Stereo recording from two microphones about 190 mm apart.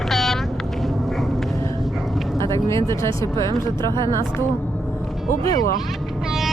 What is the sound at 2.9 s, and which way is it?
Speech, 15° left (ahead or behind).